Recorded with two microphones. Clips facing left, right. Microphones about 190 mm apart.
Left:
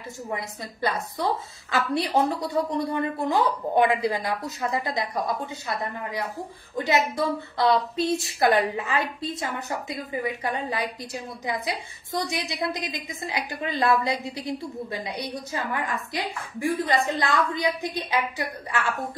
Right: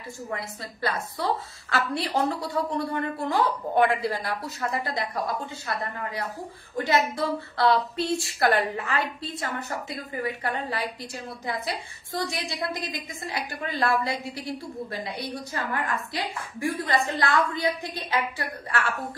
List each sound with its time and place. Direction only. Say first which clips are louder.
0.3 s a woman's voice: left 2 dB; 20° left (ahead or behind)
6.8 s a woman's voice: left 1 dB; 15° left (ahead or behind)